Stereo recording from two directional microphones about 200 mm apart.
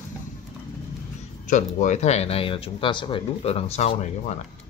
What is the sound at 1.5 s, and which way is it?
Speech, 40° left (ahead or behind).